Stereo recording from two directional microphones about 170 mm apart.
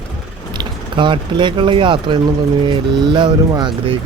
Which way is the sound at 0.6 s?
30° right (ahead or behind).